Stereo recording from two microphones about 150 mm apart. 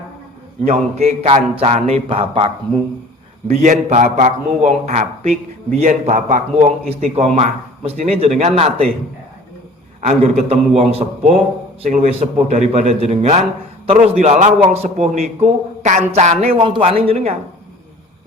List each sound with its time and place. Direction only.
0.7 s speech: 45° right (ahead or behind)
3.4 s a man's voice: 50° right (ahead or behind)
10.0 s a man's voice: 50° right (ahead or behind)